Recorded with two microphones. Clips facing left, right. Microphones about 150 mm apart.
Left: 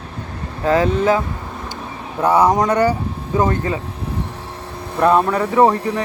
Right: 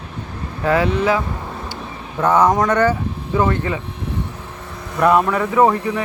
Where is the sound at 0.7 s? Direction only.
35° left (ahead or behind).